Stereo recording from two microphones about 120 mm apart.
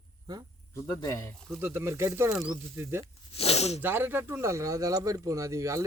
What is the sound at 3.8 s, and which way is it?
Speech, 15° right (ahead or behind).